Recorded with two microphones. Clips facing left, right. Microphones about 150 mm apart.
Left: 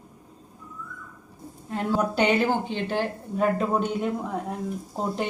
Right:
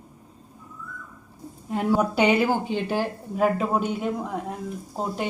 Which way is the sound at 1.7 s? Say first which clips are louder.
Right 3 dB; 15° right (ahead or behind).